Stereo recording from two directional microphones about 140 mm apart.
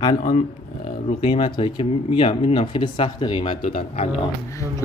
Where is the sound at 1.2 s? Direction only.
40° left (ahead or behind).